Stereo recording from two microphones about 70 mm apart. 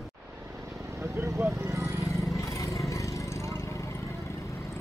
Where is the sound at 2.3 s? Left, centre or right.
Left.